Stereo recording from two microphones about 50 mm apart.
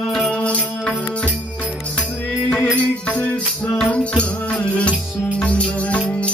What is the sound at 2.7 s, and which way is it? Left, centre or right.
Music, left.